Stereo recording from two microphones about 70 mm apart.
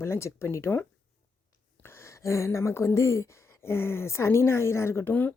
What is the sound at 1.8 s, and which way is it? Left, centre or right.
Speech, left.